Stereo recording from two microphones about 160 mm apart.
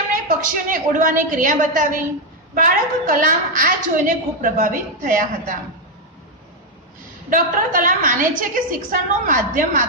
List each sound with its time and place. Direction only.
0.1 s a woman's voice: 55° right (ahead or behind)
7.2 s a woman's voice: 60° right (ahead or behind)